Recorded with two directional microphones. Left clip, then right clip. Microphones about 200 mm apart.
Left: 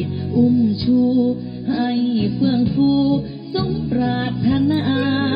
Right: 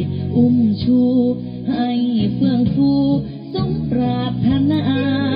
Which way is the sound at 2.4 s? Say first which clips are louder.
Right 1 dB; 30° right (ahead or behind).